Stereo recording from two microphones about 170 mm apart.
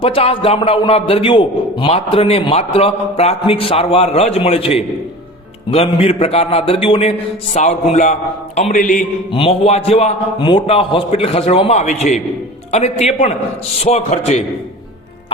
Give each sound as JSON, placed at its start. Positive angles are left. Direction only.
{"t": 0.0, "sound": "a man's voice", "side_deg": 35}
{"t": 8.7, "sound": "music", "side_deg": 50}
{"t": 9.3, "sound": "a man's voice", "side_deg": 35}